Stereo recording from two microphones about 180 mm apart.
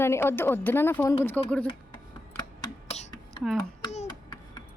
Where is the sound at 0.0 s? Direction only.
15° left (ahead or behind).